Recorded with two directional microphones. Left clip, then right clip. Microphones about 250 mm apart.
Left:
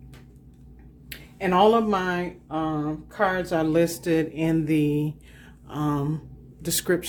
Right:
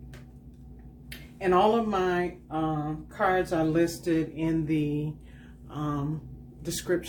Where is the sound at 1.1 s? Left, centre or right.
Left.